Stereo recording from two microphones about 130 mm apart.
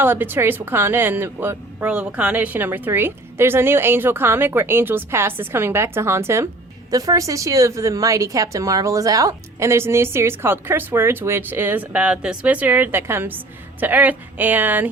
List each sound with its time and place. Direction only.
0.0 s a woman's voice: 15° right (ahead or behind)